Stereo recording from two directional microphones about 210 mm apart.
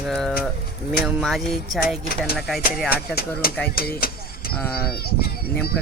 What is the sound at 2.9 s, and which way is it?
Speech, 45° left (ahead or behind).